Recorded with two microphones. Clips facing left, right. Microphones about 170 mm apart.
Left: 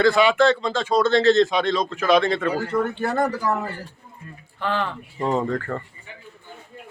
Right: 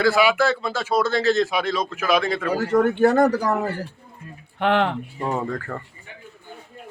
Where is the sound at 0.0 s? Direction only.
5° right (ahead or behind).